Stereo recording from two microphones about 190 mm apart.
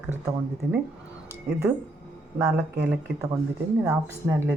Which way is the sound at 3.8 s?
15° right (ahead or behind).